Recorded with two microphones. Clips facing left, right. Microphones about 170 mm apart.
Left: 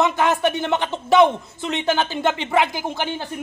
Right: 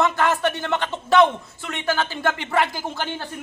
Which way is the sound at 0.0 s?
15° left (ahead or behind).